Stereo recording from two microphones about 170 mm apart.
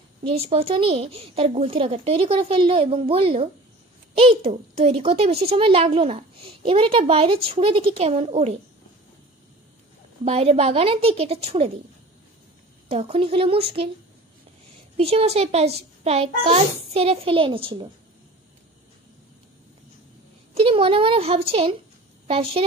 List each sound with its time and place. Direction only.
0.2 s a woman's voice: 35° right (ahead or behind)
10.2 s a woman's voice: 35° right (ahead or behind)
12.8 s a woman's voice: 35° right (ahead or behind)
15.0 s a woman's voice: 35° right (ahead or behind)
20.5 s a woman's voice: 35° right (ahead or behind)